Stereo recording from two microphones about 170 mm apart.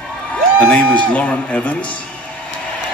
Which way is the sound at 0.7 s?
5° left (ahead or behind).